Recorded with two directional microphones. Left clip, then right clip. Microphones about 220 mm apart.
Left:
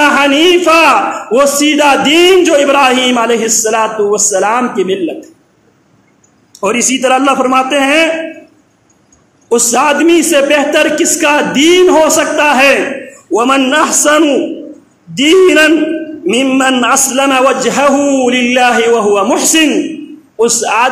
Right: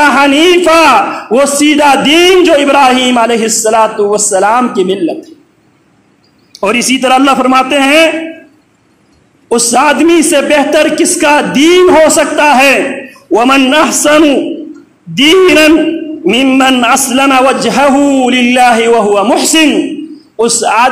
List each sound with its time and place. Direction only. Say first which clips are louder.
0.0 s a man's voice: right 2 dB; 25° right (ahead or behind)
6.6 s a man's voice: right 2 dB; 30° right (ahead or behind)
9.5 s a man's voice: right 2 dB; 25° right (ahead or behind)